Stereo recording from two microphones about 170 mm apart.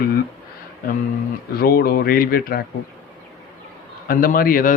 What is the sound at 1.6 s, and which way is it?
Speech, 60° left (ahead or behind).